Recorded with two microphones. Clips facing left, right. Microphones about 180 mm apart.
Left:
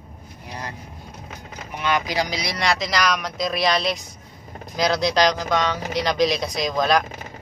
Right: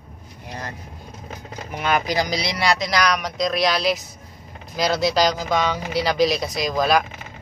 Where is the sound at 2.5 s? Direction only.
Centre (ahead or behind).